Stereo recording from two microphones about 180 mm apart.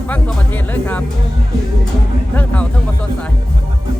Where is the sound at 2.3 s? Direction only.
5° left (ahead or behind).